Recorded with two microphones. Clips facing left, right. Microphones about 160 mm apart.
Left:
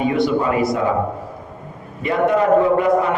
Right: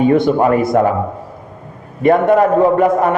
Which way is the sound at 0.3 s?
50° right (ahead or behind).